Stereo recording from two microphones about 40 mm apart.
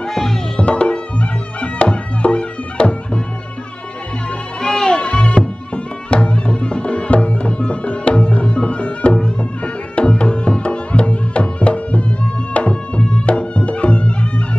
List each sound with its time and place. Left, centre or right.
0.0 s music: centre
0.6 s music: left
4.6 s music: centre